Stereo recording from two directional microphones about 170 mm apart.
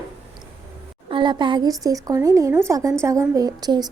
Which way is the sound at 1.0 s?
30° right (ahead or behind).